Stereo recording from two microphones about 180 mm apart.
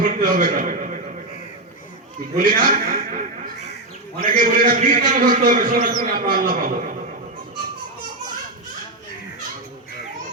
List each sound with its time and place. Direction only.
0.0 s a man's voice: 50° right (ahead or behind)
2.4 s a man's voice: 50° right (ahead or behind)
4.3 s a man's voice: 50° right (ahead or behind)